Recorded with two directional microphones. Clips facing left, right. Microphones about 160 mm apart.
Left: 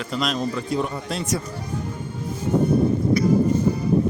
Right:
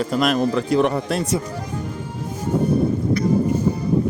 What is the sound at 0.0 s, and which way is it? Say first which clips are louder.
Speech: right 6 dB; 50° right (ahead or behind).